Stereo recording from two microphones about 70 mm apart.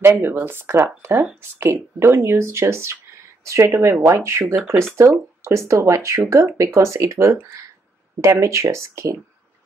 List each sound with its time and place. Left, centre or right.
0.1 s speech: right